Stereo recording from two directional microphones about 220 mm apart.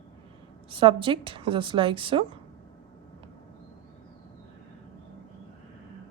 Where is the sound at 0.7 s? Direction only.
25° right (ahead or behind).